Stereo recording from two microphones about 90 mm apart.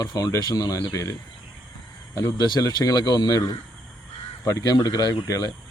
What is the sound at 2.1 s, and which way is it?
Speech, 45° left (ahead or behind).